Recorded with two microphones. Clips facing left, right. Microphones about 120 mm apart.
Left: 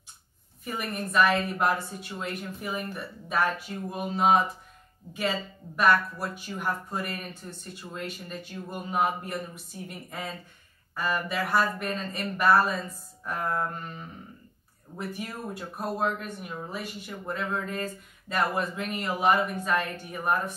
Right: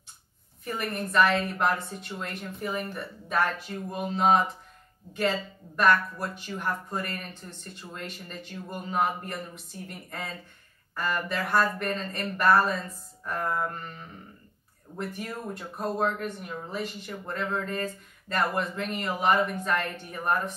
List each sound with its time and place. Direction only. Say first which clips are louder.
0.7 s speech: right 1 dB; 5° left (ahead or behind)